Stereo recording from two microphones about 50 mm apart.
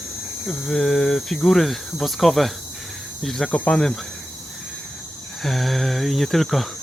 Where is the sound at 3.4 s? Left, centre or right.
Left.